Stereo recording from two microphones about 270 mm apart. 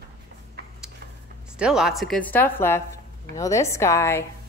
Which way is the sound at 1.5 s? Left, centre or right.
Centre.